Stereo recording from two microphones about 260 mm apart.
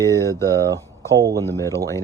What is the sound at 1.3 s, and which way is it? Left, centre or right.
Speech, centre.